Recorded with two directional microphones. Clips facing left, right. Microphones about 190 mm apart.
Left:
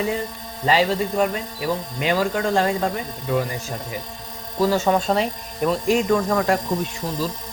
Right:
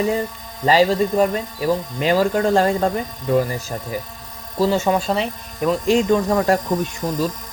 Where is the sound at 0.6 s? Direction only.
40° right (ahead or behind).